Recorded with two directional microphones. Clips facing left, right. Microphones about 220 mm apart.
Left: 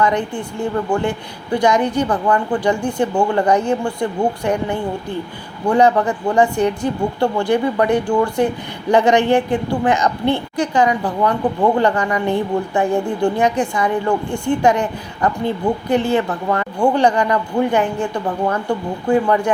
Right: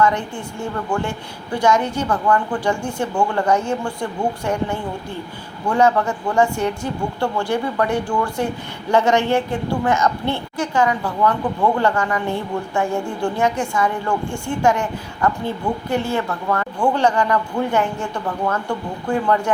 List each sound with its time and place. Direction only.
0.0 s a woman's voice: 15° left (ahead or behind)
1.5 s a woman's voice: 15° left (ahead or behind)